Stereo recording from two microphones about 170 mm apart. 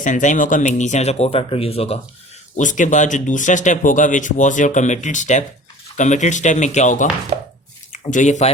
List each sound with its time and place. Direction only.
0.0 s speech: 45° left (ahead or behind)
2.6 s speech: 50° left (ahead or behind)
7.3 s chopping: 40° right (ahead or behind)
7.9 s speech: 45° left (ahead or behind)